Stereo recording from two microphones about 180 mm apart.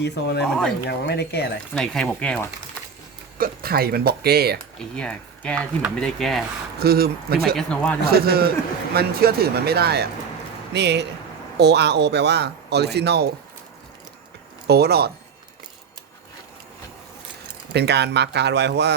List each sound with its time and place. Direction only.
0.0 s speech: 70° left (ahead or behind)
1.7 s speech: 5° left (ahead or behind)
3.3 s speech: 55° right (ahead or behind)
4.9 s speech: 5° left (ahead or behind)
6.7 s speech: 60° right (ahead or behind)
7.5 s speech: 5° left (ahead or behind)
8.0 s speech: 60° right (ahead or behind)
14.7 s speech: 60° right (ahead or behind)
17.7 s speech: 70° right (ahead or behind)